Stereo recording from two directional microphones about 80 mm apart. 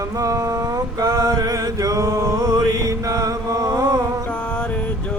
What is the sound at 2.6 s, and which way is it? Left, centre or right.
Mantra, right.